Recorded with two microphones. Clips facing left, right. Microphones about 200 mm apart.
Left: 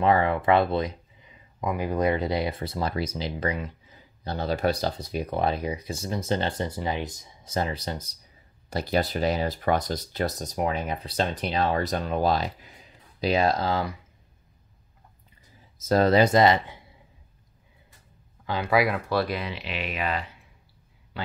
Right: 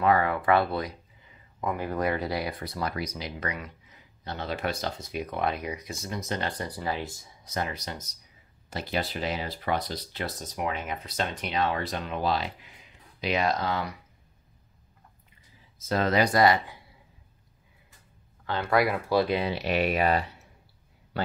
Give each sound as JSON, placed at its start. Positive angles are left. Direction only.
{"t": 0.0, "sound": "speech", "side_deg": 25}
{"t": 15.8, "sound": "speech", "side_deg": 40}
{"t": 18.5, "sound": "speech", "side_deg": 5}
{"t": 19.0, "sound": "speech", "side_deg": -15}
{"t": 19.3, "sound": "speech", "side_deg": -35}